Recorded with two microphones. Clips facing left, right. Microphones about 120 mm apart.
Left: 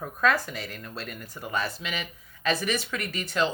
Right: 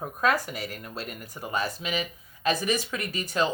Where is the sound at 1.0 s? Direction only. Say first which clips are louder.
Right 1 dB; 15° right (ahead or behind).